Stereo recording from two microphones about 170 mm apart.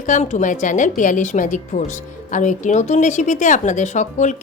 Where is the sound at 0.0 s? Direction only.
45° left (ahead or behind).